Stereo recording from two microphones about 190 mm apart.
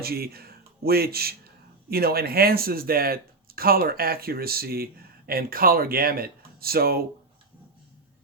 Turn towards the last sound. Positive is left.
turn(degrees=-50)  # may be behind; listen again after turning